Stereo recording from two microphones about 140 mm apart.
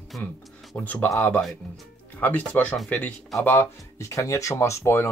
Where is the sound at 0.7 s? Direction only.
10° left (ahead or behind).